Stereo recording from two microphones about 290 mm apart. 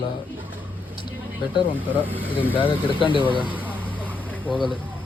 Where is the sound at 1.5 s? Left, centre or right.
Centre.